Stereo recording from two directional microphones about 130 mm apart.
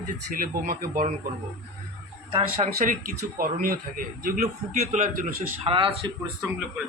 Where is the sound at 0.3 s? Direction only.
90° right.